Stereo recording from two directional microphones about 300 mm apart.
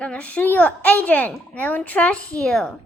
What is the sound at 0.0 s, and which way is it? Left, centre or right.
Speech, centre.